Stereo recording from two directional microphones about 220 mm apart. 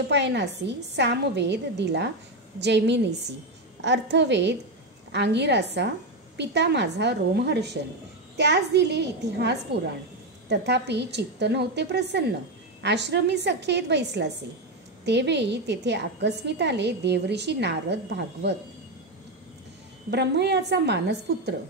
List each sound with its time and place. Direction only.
0.1 s a woman's voice: 50° right (ahead or behind)
20.1 s a woman's voice: 50° right (ahead or behind)